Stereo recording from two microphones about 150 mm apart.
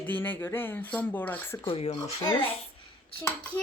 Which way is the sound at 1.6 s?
40° left (ahead or behind).